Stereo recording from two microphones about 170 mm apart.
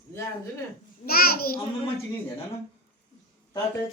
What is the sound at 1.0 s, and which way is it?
Speech, 60° left (ahead or behind).